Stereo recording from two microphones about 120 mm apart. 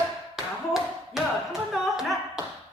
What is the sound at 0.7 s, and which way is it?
Tap, 5° right (ahead or behind).